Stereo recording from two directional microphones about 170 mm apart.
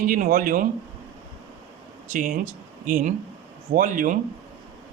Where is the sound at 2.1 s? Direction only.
45° right (ahead or behind).